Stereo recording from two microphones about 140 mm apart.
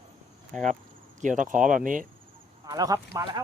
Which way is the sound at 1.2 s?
70° right (ahead or behind).